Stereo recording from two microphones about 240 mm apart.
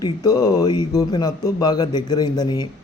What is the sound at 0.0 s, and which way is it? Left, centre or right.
Speech, centre.